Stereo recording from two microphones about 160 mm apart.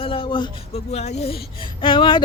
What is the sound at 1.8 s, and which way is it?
Speech, 30° left (ahead or behind).